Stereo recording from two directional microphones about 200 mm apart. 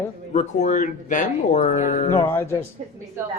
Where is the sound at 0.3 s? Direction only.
40° left (ahead or behind).